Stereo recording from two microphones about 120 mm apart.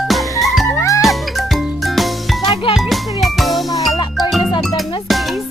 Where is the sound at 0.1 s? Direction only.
Centre (ahead or behind).